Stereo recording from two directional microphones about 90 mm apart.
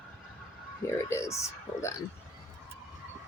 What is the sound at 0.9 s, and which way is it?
Speech, 35° left (ahead or behind).